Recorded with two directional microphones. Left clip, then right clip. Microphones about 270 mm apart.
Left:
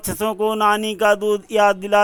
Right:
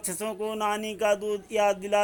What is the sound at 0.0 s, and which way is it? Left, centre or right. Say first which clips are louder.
Speech: left 11 dB; centre.